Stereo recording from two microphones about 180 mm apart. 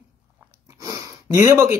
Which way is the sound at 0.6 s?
20° right (ahead or behind).